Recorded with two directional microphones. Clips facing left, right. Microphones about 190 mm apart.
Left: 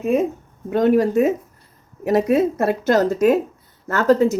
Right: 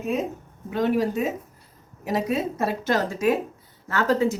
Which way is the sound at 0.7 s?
50° left (ahead or behind).